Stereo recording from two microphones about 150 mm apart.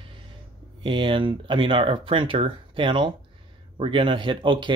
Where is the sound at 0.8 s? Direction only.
35° right (ahead or behind).